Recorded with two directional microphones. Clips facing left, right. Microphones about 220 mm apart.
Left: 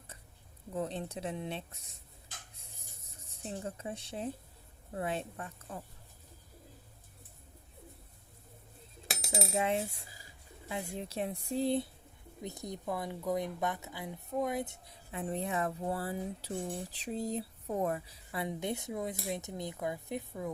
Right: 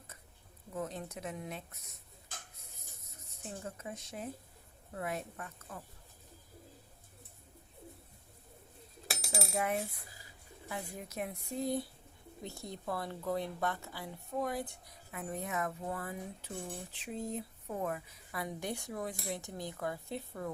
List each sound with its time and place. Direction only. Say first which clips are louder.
0.8 s speech: left 3 dB; 30° left (ahead or behind)
3.1 s a woman's voice: left 4 dB; 30° left (ahead or behind)
9.3 s a woman's voice: left 3 dB; 20° left (ahead or behind)
12.4 s a woman's voice: left 3 dB; 20° left (ahead or behind)